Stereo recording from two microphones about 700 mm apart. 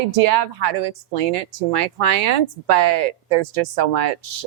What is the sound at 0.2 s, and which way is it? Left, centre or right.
A woman's voice, right.